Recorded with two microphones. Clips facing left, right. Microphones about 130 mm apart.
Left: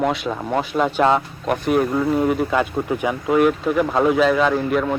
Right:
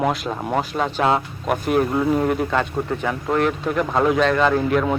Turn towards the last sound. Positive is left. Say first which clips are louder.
# even
turn(degrees=0)  # may be behind; listen again after turning